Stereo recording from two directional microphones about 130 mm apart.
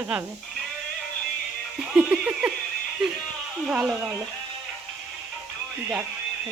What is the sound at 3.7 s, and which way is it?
Speech, 10° right (ahead or behind).